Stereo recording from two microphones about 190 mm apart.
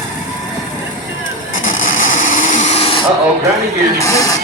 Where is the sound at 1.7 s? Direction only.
45° left (ahead or behind); by 3.0 s 30° left (ahead or behind).